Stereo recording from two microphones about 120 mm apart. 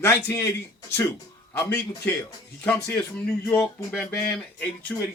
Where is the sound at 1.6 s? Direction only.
15° left (ahead or behind).